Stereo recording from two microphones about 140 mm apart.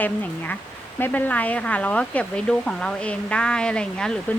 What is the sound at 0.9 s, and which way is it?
Speech, 15° left (ahead or behind).